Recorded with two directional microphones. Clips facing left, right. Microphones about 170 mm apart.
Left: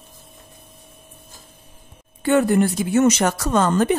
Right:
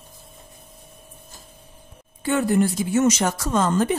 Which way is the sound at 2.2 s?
60° left (ahead or behind).